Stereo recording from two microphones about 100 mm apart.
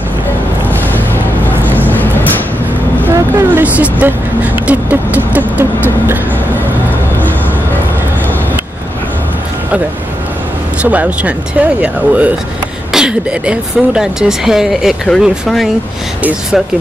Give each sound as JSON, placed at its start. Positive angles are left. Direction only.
{"t": 0.7, "sound": "music", "side_deg": 20}
{"t": 3.1, "sound": "vehicle", "side_deg": -35}
{"t": 3.5, "sound": "vehicle", "side_deg": -15}
{"t": 4.6, "sound": "speech", "side_deg": -15}
{"t": 10.8, "sound": "speech", "side_deg": -15}